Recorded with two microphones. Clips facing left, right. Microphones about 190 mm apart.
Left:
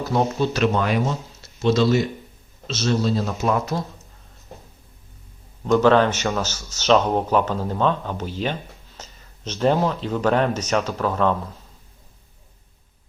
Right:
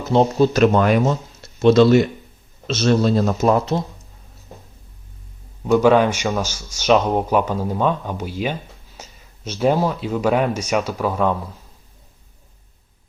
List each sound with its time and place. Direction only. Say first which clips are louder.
0.0 s speech: right 5 dB; 25° right (ahead or behind)
0.3 s speech: right 6 dB; 45° right (ahead or behind)
3.4 s speech: right 4 dB; 35° right (ahead or behind)
5.6 s speech: right 2 dB; 10° right (ahead or behind)